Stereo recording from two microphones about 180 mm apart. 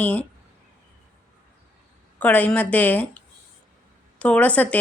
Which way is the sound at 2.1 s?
10° left (ahead or behind).